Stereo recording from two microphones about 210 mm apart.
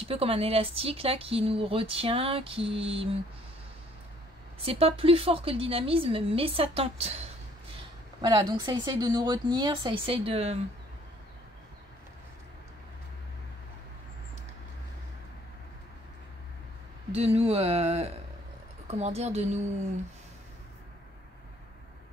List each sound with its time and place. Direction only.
0.0 s speech: 25° right (ahead or behind)
4.6 s speech: 25° right (ahead or behind)
8.2 s speech: 20° right (ahead or behind)
17.1 s speech: 30° right (ahead or behind)